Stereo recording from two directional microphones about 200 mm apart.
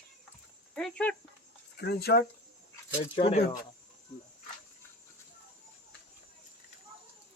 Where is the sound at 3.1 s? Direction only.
30° left (ahead or behind).